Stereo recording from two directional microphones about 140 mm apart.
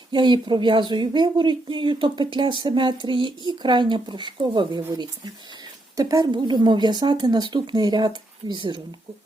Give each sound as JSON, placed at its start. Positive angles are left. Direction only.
{"t": 0.1, "sound": "speech", "side_deg": -35}